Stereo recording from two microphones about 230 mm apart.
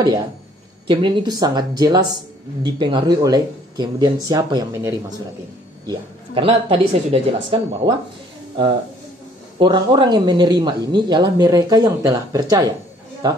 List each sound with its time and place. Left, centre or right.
0.8 s speech: centre
9.6 s speech: centre